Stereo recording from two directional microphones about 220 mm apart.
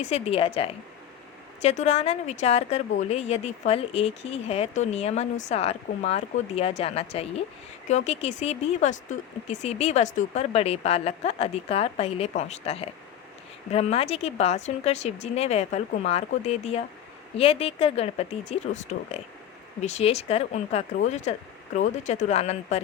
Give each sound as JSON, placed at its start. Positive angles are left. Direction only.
{"t": 0.1, "sound": "speech", "side_deg": 25}